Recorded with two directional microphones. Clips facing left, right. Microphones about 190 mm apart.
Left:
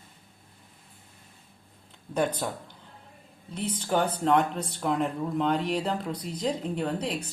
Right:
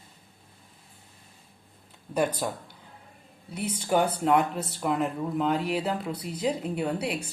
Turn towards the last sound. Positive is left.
turn(degrees=-10)  # may be behind; listen again after turning